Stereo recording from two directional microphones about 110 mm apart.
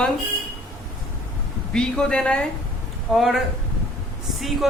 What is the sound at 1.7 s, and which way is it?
Speech, 10° left (ahead or behind).